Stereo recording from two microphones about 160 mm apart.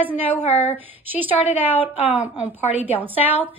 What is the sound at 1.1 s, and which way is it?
A woman's voice, 10° right (ahead or behind).